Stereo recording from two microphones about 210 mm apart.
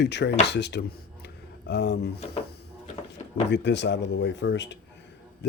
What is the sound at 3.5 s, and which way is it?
Speech, 55° left (ahead or behind).